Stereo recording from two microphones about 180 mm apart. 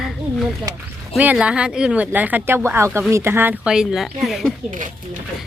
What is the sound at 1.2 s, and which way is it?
Speech, 5° right (ahead or behind).